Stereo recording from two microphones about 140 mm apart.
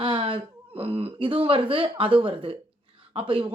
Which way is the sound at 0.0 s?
40° right (ahead or behind).